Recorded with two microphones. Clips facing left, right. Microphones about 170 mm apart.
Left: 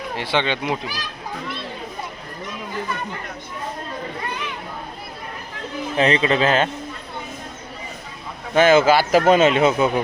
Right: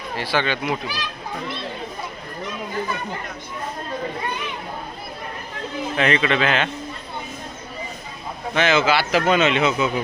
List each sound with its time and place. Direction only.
0.2 s speech: 25° left (ahead or behind)
6.0 s a man's voice: 30° left (ahead or behind)
8.5 s a man's voice: 50° left (ahead or behind)